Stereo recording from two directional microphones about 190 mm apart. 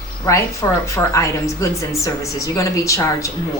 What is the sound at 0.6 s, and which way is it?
A woman's voice, 15° left (ahead or behind).